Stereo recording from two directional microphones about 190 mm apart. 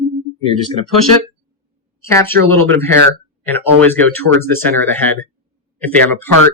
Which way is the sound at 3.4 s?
10° left (ahead or behind).